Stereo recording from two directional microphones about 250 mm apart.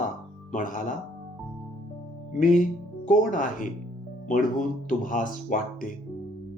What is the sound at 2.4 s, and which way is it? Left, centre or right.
Speech, left.